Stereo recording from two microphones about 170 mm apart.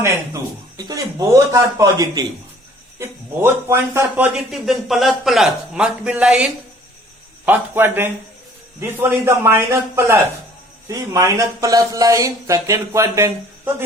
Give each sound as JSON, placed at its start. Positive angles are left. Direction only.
{"t": 0.9, "sound": "a man's voice", "side_deg": -20}
{"t": 4.5, "sound": "a man's voice", "side_deg": 0}